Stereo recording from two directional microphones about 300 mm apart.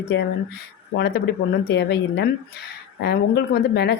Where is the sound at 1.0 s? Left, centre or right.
Left.